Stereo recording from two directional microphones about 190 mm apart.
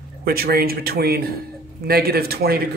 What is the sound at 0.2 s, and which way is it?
Speech, 55° right (ahead or behind).